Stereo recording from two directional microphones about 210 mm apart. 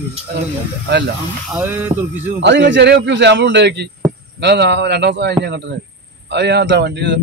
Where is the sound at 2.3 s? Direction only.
55° right (ahead or behind).